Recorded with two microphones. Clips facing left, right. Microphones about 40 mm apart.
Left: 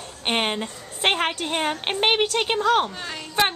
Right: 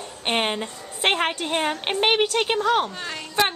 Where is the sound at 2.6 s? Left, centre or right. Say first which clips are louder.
Left 3 dB; centre.